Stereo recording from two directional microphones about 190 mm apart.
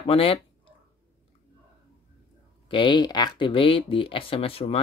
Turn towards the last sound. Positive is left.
turn(degrees=30)  # may be behind; listen again after turning